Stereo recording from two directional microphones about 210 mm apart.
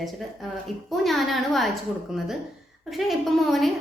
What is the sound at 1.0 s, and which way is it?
Speech, centre (ahead or behind).